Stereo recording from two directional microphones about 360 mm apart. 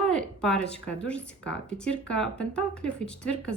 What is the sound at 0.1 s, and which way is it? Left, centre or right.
Speech, centre.